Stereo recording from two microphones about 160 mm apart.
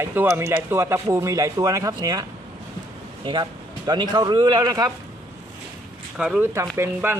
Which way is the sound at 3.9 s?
25° right (ahead or behind).